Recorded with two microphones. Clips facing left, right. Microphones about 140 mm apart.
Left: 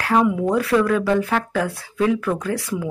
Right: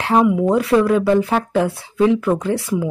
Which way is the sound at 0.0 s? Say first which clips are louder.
Right 3 dB; 25° right (ahead or behind).